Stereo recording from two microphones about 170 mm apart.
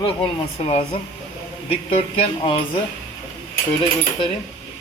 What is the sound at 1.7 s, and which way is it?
Speech, 35° left (ahead or behind).